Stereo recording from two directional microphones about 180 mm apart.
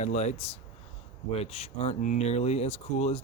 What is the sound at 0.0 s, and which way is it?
Speech, 40° left (ahead or behind).